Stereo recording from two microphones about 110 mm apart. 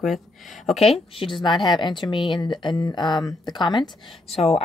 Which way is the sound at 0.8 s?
55° left (ahead or behind).